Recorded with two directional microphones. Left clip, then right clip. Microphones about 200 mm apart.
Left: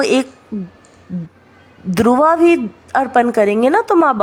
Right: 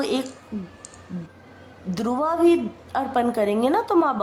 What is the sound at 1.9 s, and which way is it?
A woman's voice, 40° left (ahead or behind).